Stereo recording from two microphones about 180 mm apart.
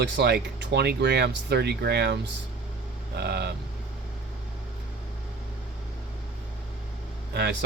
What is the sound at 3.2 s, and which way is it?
Speech, 65° right (ahead or behind).